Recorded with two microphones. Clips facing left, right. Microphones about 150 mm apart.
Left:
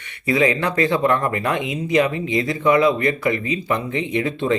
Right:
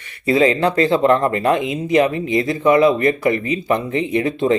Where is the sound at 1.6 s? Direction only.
20° left (ahead or behind).